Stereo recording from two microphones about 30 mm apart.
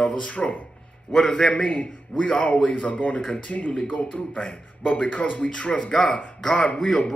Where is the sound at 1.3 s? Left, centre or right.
Left.